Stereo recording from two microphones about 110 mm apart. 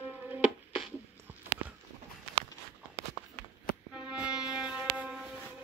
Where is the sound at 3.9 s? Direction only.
10° right (ahead or behind).